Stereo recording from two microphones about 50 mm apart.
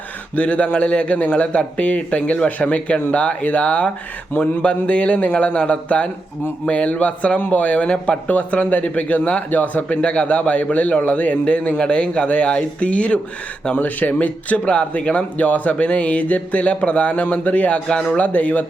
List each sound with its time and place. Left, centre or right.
0.3 s speech: left
8.4 s speech: left